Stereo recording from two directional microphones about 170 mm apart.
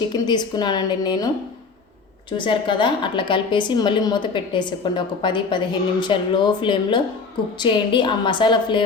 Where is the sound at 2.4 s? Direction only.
30° left (ahead or behind).